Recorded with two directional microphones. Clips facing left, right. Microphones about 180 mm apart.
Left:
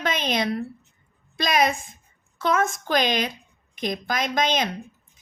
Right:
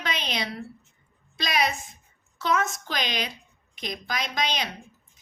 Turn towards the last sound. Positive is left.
turn(degrees=50)  # may be behind; listen again after turning